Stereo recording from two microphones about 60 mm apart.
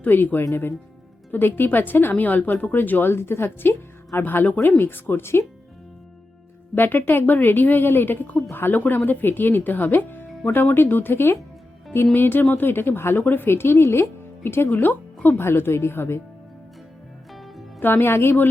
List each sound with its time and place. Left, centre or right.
0.0 s a woman's voice: left
6.7 s a woman's voice: left
17.3 s music: centre
17.7 s a woman's voice: left